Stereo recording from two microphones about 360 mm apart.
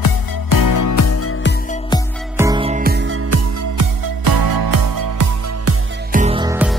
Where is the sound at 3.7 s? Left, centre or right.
Right.